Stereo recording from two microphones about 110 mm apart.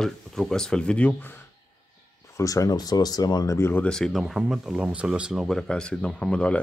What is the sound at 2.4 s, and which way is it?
Speech, 30° left (ahead or behind).